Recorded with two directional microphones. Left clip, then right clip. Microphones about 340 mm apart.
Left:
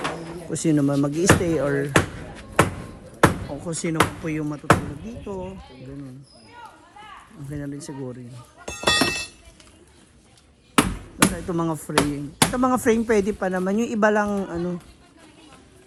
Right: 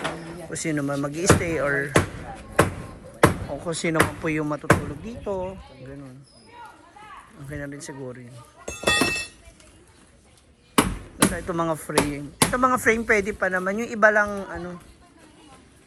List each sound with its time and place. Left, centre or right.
0.0 s a sound: centre
1.5 s basketball bounce: centre
3.8 s speech: centre
7.5 s speech: centre
8.6 s a sound: centre
10.8 s chop: centre